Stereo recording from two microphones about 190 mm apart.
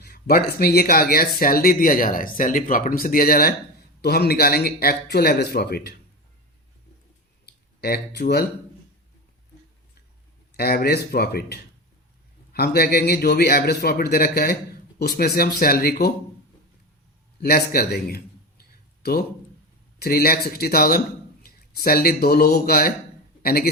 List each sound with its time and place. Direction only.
0.0 s a man's voice: 50° left (ahead or behind)
7.4 s a sound: 55° left (ahead or behind)
10.6 s a man's voice: 55° left (ahead or behind)
17.4 s a man's voice: 50° left (ahead or behind)
20.0 s a man's voice: 55° left (ahead or behind)